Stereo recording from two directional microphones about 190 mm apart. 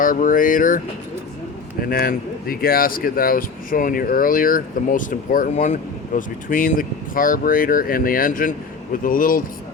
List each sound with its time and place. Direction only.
0.0 s speech: 45° left (ahead or behind)
1.8 s speech: 50° left (ahead or behind)